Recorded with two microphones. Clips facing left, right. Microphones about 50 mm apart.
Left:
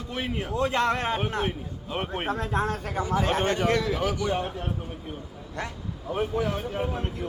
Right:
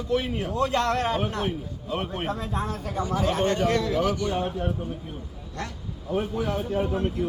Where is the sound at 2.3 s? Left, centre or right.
Left.